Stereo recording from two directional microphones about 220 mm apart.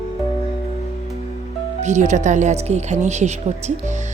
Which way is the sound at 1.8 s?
30° right (ahead or behind).